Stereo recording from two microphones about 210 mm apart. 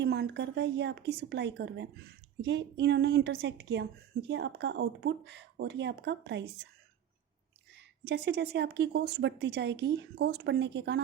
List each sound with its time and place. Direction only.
0.0 s speech: 55° right (ahead or behind)
8.0 s speech: 50° right (ahead or behind)